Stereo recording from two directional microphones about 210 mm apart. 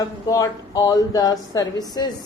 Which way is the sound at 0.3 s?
15° left (ahead or behind).